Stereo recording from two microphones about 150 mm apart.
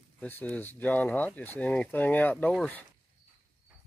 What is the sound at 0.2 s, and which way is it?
Speech, 10° left (ahead or behind).